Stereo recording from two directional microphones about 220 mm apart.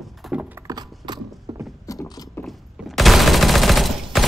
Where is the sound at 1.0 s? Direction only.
20° right (ahead or behind).